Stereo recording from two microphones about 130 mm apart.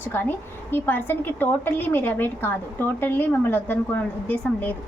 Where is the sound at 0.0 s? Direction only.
15° left (ahead or behind).